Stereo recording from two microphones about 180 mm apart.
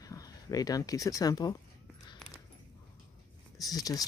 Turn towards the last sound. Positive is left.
turn(degrees=20)  # may be behind; listen again after turning